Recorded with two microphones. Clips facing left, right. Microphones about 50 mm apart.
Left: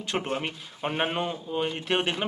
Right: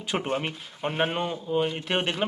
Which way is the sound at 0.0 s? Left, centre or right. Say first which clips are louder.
Right 1 dB; centre.